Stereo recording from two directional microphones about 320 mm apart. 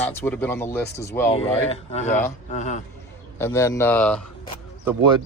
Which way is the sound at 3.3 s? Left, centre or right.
Centre.